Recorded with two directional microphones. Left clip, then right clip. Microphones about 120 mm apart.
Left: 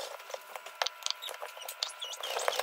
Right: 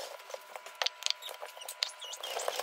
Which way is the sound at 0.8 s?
10° right (ahead or behind).